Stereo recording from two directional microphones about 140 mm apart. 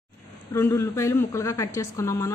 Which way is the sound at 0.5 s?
20° left (ahead or behind).